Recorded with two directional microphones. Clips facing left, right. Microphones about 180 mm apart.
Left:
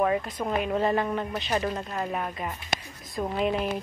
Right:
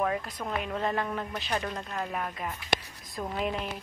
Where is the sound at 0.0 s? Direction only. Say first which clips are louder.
Left 5 dB; 5° left (ahead or behind).